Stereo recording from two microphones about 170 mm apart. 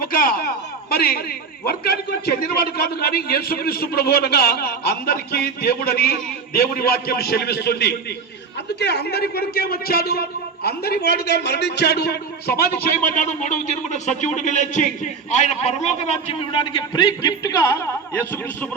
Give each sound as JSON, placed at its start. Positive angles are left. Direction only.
{"t": 0.1, "sound": "a man's voice", "side_deg": 55}
{"t": 13.1, "sound": "speech", "side_deg": 45}